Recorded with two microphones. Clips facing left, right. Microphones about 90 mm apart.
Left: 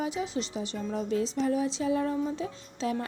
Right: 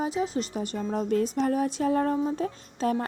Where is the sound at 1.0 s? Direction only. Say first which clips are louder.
Right 3 dB; 50° right (ahead or behind).